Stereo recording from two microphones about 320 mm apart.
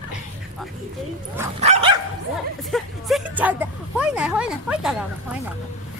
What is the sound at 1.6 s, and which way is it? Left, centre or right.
Dog, centre.